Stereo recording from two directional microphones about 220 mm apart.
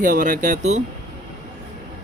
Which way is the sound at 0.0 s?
35° right (ahead or behind).